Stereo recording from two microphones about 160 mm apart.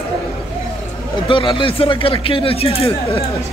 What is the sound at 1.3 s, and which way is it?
A man's voice, 35° left (ahead or behind).